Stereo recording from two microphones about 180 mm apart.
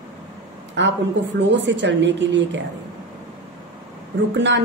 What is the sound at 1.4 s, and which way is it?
A woman's voice, 80° right.